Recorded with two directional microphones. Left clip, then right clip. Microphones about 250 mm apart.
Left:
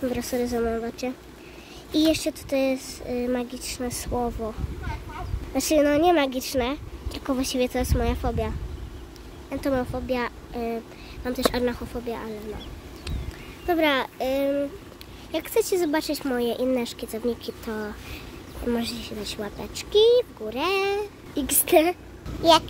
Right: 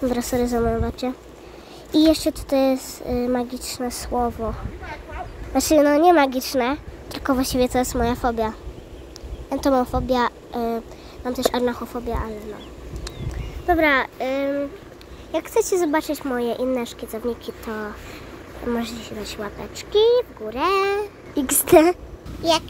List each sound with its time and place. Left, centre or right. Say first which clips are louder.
0.1 s speech: right 5 dB; centre
13.7 s speech: right 4 dB; centre
15.7 s speech: right 3 dB; centre